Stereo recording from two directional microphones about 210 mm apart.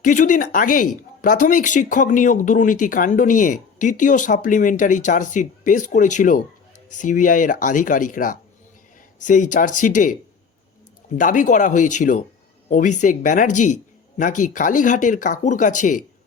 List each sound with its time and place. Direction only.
0.0 s speech: 40° left (ahead or behind)
11.2 s speech: 40° left (ahead or behind)